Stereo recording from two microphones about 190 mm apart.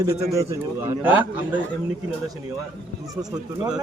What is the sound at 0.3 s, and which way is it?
A man's voice, 15° right (ahead or behind).